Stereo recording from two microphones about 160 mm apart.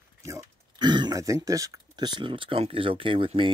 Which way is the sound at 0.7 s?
25° right (ahead or behind).